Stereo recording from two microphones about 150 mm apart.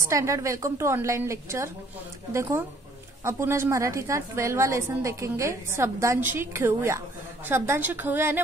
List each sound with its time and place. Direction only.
0.0 s a woman's voice: 20° right (ahead or behind)